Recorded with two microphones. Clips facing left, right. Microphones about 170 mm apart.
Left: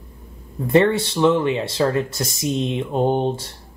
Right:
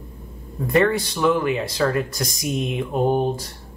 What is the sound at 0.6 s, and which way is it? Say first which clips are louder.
Speech: left 3 dB; 25° left (ahead or behind).